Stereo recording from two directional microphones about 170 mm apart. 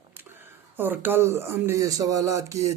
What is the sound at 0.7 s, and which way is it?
A man's voice, 10° right (ahead or behind).